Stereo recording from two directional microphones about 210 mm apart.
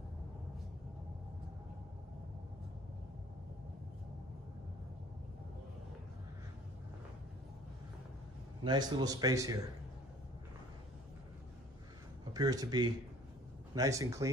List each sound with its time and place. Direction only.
8.6 s speech: 20° right (ahead or behind)
12.4 s speech: 20° right (ahead or behind)